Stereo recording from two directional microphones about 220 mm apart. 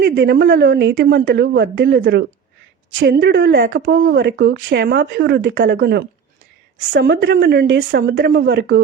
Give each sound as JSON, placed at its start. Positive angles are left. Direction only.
{"t": 0.0, "sound": "speech", "side_deg": -55}
{"t": 3.7, "sound": "speech", "side_deg": -40}
{"t": 4.0, "sound": "speech", "side_deg": -55}